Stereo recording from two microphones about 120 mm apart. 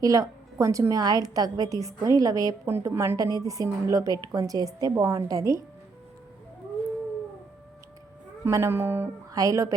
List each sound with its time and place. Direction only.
0.0 s a woman's voice: 30° right (ahead or behind)
8.4 s a woman's voice: 25° right (ahead or behind)
9.3 s a woman's voice: 30° right (ahead or behind)